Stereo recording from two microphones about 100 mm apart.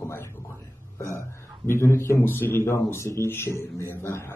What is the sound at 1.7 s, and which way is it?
A man's voice, 25° left (ahead or behind).